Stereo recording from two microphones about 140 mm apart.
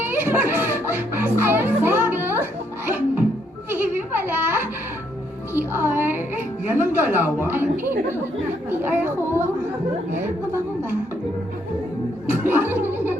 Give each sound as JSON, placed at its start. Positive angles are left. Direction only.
{"t": 0.0, "sound": "music", "side_deg": -15}
{"t": 3.7, "sound": "a sound", "side_deg": -15}
{"t": 5.5, "sound": "a woman's voice", "side_deg": -15}
{"t": 12.3, "sound": "speech", "side_deg": -15}